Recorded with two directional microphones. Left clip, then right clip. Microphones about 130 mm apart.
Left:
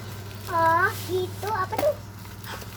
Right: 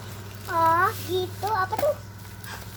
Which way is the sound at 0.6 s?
40° right (ahead or behind).